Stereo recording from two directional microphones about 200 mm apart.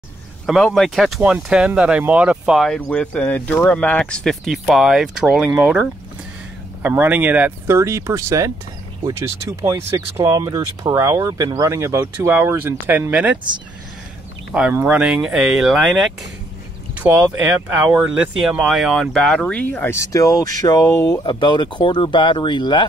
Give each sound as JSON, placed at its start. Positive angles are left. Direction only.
{"t": 0.5, "sound": "speech", "side_deg": 0}
{"t": 9.6, "sound": "speech", "side_deg": -15}
{"t": 14.5, "sound": "speech", "side_deg": -10}